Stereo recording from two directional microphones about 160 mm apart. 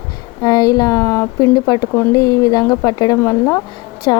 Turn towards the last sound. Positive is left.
turn(degrees=25)  # may be behind; listen again after turning